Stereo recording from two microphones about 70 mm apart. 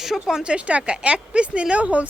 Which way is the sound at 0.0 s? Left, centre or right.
Centre.